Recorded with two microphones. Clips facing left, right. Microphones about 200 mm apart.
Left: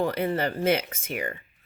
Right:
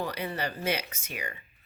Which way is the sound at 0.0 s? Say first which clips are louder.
Left 7 dB; 50° left (ahead or behind).